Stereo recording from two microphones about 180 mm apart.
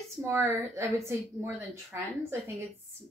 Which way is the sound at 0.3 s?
15° right (ahead or behind).